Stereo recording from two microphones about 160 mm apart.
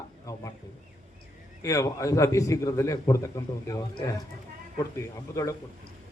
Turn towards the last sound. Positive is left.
turn(degrees=20)  # may be behind; listen again after turning